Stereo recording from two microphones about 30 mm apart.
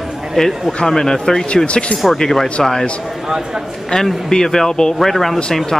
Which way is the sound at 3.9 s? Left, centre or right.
Left.